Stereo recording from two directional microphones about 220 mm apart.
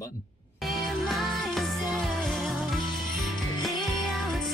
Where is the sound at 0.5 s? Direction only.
Centre (ahead or behind).